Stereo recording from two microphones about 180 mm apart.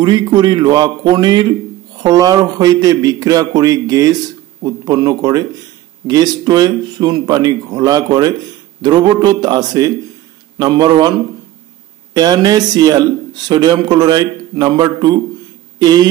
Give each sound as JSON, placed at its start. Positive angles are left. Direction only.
{"t": 0.0, "sound": "speech", "side_deg": -25}